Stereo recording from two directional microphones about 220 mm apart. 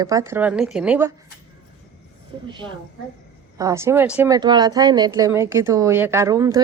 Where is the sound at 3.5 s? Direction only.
15° right (ahead or behind).